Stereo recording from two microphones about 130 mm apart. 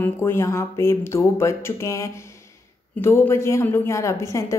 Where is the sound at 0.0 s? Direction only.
20° left (ahead or behind).